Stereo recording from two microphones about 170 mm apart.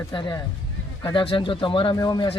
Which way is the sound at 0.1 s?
25° left (ahead or behind).